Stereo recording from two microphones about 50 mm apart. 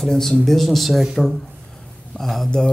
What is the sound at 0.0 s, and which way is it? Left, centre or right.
Speech, centre.